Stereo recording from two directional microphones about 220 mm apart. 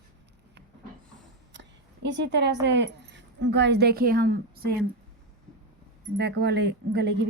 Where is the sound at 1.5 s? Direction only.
55° right (ahead or behind).